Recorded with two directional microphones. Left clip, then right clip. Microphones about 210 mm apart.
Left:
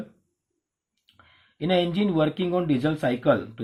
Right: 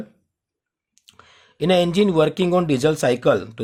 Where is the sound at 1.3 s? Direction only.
55° right (ahead or behind).